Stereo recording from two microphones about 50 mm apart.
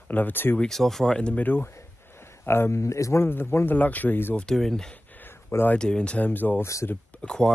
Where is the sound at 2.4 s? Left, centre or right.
Left.